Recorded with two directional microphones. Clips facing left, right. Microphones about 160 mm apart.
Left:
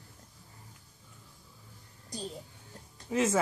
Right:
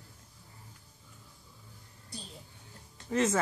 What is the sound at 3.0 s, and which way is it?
Speech, 5° left (ahead or behind).